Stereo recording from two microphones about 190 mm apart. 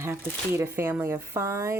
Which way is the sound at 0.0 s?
15° right (ahead or behind).